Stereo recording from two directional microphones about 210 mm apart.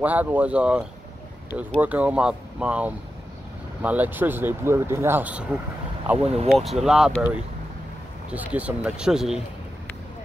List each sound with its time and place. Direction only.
0.0 s speech: 5° right (ahead or behind)
6.1 s speech: 30° right (ahead or behind)
6.5 s speech: centre (ahead or behind)
8.3 s speech: 5° right (ahead or behind)